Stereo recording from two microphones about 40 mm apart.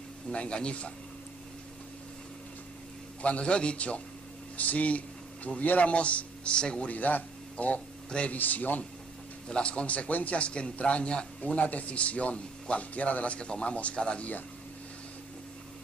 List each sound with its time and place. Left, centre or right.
0.3 s a man's voice: left
3.2 s a man's voice: left
6.9 s a man's voice: left
8.4 s a man's voice: left
9.5 s a man's voice: left
11.4 s a man's voice: left